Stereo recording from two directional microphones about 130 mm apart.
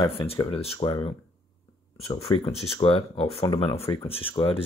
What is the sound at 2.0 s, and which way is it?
Speech, 55° left (ahead or behind).